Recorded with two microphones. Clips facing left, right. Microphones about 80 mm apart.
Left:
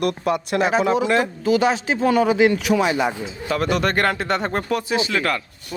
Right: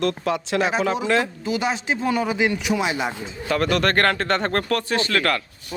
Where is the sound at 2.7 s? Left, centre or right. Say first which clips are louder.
Left 4 dB; left.